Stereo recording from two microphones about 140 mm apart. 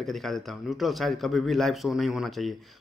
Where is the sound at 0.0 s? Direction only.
Centre (ahead or behind).